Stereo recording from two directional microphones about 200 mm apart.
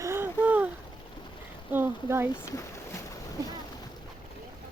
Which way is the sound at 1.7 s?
10° right (ahead or behind).